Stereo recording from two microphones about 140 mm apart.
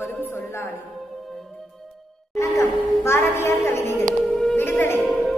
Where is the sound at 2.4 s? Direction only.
20° left (ahead or behind).